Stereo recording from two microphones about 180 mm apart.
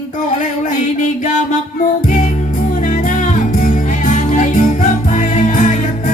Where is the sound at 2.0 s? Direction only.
45° left (ahead or behind).